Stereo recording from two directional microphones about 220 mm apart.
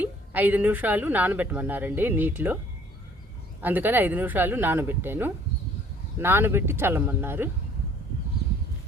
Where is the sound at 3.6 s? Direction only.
10° right (ahead or behind).